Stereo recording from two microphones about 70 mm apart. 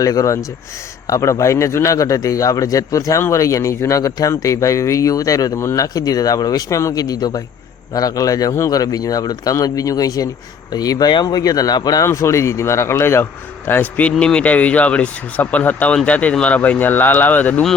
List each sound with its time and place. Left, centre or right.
0.0 s a man's voice: left
10.7 s speech: left
12.1 s a man's voice: left
13.7 s speech: left